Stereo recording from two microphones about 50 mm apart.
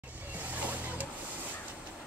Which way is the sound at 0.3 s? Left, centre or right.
Right.